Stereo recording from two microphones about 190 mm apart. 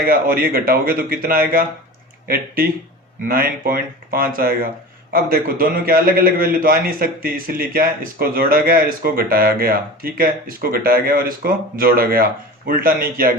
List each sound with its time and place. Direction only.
0.0 s a man's voice: 50° right (ahead or behind)